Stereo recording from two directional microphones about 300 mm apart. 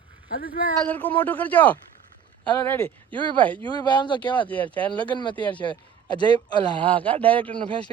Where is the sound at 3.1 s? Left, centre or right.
Centre.